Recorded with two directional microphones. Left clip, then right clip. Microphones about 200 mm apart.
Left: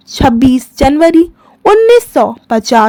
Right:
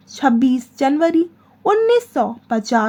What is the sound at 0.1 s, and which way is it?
A woman's voice, 45° left (ahead or behind).